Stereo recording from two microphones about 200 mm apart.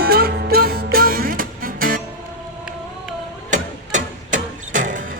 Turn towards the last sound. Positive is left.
turn(degrees=-40)  # may be behind; listen again after turning